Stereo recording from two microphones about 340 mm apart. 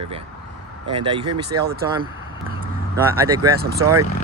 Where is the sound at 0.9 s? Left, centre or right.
Centre.